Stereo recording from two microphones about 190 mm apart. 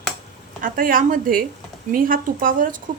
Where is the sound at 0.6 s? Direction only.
45° right (ahead or behind).